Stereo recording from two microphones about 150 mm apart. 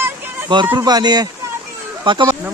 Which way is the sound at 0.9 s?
25° right (ahead or behind).